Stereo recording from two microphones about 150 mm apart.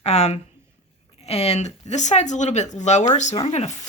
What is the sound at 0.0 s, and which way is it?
Speech, 45° left (ahead or behind).